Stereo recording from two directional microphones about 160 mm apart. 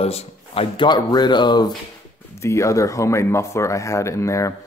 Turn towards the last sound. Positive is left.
turn(degrees=20)  # may be behind; listen again after turning